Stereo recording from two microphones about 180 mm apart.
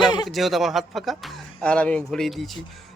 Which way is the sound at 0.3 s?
Centre (ahead or behind).